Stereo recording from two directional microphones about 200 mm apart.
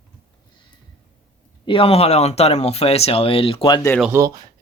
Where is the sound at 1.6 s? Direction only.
25° left (ahead or behind).